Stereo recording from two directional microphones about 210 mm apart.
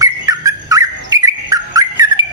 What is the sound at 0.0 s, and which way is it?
Bird, 15° right (ahead or behind).